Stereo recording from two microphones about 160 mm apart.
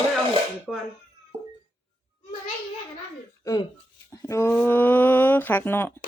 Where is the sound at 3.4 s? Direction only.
25° left (ahead or behind).